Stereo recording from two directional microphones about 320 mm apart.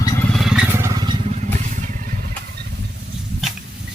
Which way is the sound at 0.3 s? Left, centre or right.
Centre.